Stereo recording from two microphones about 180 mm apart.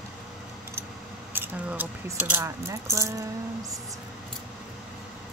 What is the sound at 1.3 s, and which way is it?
A woman's voice, 10° right (ahead or behind).